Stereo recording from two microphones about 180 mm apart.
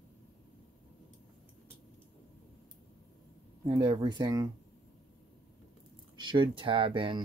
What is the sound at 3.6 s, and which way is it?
Speech, 25° right (ahead or behind).